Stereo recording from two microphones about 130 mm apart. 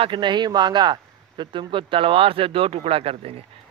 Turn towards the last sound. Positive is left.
turn(degrees=-45)  # may be behind; listen again after turning